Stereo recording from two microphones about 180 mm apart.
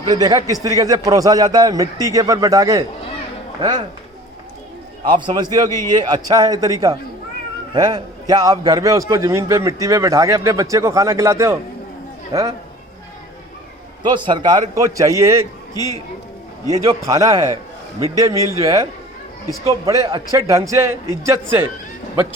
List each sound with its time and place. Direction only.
0.1 s a man's voice: 20° right (ahead or behind)
5.0 s a man's voice: 25° right (ahead or behind)
14.0 s a man's voice: 25° right (ahead or behind)
15.7 s speech: 20° left (ahead or behind)
17.1 s a man's voice: 20° right (ahead or behind)